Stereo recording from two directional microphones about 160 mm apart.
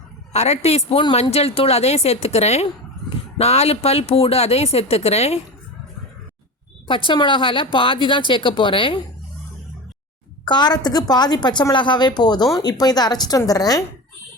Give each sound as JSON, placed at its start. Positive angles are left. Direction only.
{"t": 0.3, "sound": "speech", "side_deg": 40}
{"t": 7.1, "sound": "speech", "side_deg": 30}
{"t": 10.4, "sound": "a woman's voice", "side_deg": 25}